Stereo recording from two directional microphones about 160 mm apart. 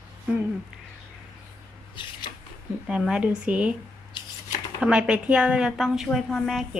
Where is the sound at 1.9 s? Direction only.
30° left (ahead or behind).